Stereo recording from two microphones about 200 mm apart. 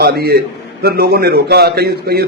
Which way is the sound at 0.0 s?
50° right (ahead or behind).